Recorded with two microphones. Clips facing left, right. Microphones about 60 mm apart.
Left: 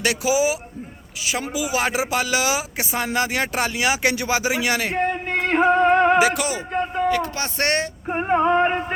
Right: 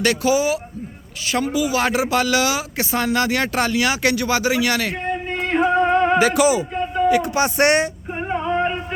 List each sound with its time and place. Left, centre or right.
0.0 s speech: centre
5.3 s music: left
6.1 s a man's voice: centre
7.1 s speech: centre
8.3 s male singing: left